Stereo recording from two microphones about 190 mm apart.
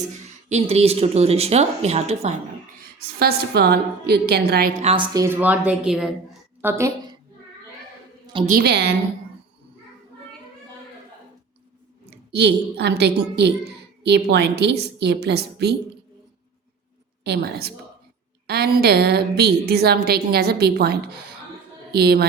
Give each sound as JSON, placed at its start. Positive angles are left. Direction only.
{"t": 0.4, "sound": "speech", "side_deg": -35}
{"t": 3.2, "sound": "a woman's voice", "side_deg": -55}
{"t": 4.8, "sound": "speech", "side_deg": -30}
{"t": 5.1, "sound": "a woman's voice", "side_deg": -15}
{"t": 8.4, "sound": "a woman's voice", "side_deg": -50}
{"t": 12.1, "sound": "a woman's voice", "side_deg": -60}
{"t": 17.2, "sound": "a woman's voice", "side_deg": -60}